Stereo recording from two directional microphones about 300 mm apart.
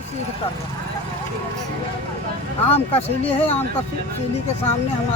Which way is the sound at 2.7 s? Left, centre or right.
Centre.